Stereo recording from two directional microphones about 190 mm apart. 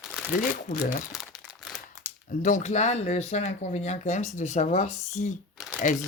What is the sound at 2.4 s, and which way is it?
Speech, 40° left (ahead or behind).